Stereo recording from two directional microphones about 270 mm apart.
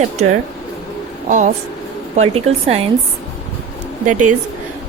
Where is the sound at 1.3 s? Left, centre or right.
Right.